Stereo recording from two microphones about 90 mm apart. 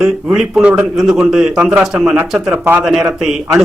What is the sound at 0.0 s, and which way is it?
A man's voice, 5° right (ahead or behind).